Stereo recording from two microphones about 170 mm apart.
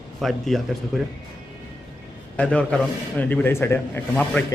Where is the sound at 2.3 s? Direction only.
5° left (ahead or behind).